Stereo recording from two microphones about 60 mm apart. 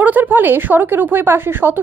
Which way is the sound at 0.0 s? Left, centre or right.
Right.